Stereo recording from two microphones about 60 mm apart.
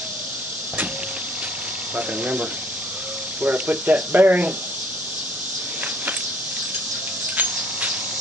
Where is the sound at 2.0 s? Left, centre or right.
Right.